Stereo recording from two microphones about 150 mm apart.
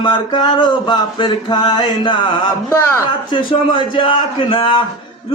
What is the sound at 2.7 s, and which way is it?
Speech, 15° left (ahead or behind).